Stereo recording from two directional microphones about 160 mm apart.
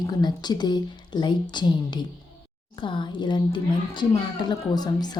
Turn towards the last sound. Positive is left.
turn(degrees=25)  # may be behind; listen again after turning